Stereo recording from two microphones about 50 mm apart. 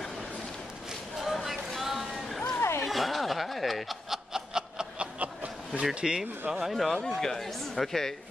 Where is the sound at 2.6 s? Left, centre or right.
Left.